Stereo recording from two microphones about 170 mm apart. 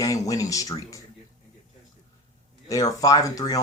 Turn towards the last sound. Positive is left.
turn(degrees=20)  # may be behind; listen again after turning